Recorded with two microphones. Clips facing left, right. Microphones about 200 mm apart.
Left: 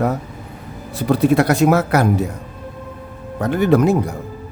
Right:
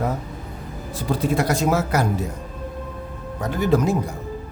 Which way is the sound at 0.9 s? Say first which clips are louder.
Left 7 dB; 65° left (ahead or behind).